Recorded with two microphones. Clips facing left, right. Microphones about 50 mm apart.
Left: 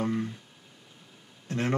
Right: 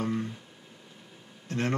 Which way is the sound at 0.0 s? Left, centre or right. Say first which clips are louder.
Left 1 dB; centre.